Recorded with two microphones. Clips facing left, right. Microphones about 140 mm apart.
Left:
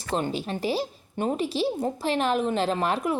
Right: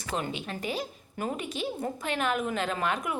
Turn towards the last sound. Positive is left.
turn(degrees=35)  # may be behind; listen again after turning